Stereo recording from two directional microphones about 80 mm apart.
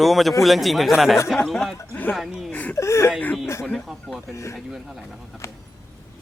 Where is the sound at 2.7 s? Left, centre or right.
Left.